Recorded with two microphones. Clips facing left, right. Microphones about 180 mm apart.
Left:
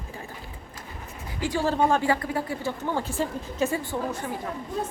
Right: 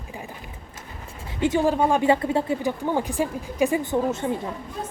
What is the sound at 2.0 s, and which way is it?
Speech, 25° right (ahead or behind).